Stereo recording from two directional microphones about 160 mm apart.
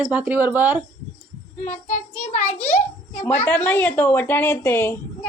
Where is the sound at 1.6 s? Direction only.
50° left (ahead or behind).